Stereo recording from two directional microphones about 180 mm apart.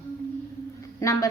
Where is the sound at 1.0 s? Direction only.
20° left (ahead or behind).